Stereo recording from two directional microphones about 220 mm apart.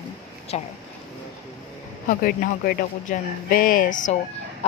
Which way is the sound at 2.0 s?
40° left (ahead or behind).